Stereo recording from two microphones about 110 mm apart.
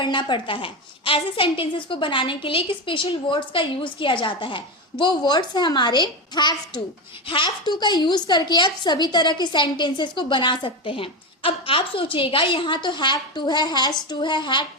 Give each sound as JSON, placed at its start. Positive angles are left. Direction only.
{"t": 0.0, "sound": "a woman's voice", "side_deg": 45}